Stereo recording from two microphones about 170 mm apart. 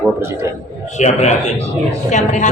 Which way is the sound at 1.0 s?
45° left (ahead or behind).